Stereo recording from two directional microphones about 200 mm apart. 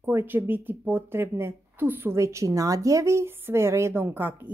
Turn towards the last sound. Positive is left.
turn(degrees=-10)  # may be behind; listen again after turning